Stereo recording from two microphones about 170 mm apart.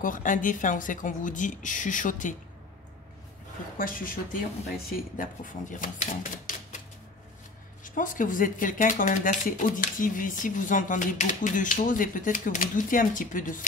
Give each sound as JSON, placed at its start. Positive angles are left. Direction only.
{"t": 0.0, "sound": "speech", "side_deg": 50}
{"t": 3.7, "sound": "speech", "side_deg": 55}
{"t": 7.8, "sound": "speech", "side_deg": 50}